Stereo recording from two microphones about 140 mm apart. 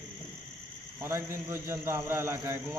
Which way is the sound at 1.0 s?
20° right (ahead or behind).